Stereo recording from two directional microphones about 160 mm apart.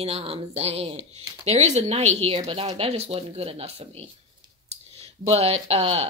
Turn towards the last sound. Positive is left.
turn(degrees=-40)  # may be behind; listen again after turning